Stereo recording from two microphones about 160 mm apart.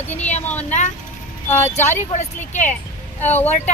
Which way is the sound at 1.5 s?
15° left (ahead or behind).